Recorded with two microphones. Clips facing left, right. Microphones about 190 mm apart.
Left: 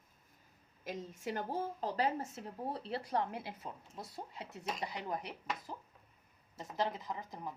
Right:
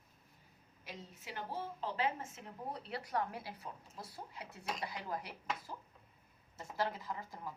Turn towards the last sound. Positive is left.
turn(degrees=20)  # may be behind; listen again after turning